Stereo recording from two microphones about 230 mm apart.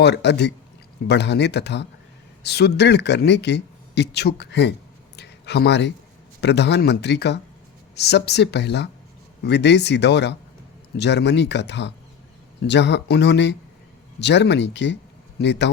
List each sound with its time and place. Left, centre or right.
0.0 s a man's voice: left
5.1 s a sound: left
6.4 s a man's voice: left